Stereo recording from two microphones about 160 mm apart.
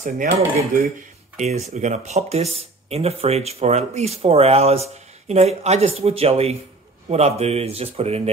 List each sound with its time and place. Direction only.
0.0 s speech: 55° right (ahead or behind); by 8.2 s 40° right (ahead or behind)